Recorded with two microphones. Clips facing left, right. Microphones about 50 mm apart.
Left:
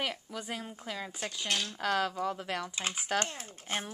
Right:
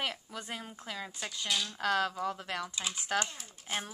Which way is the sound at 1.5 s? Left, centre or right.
Left.